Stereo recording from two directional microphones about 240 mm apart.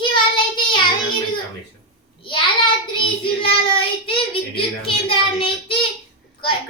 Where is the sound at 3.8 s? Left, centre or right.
Left.